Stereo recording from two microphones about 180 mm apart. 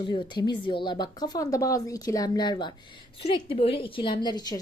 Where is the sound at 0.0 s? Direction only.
25° left (ahead or behind).